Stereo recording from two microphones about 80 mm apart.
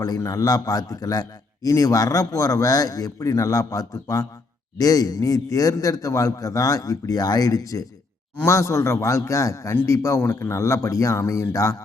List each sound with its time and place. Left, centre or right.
0.0 s a man's voice: left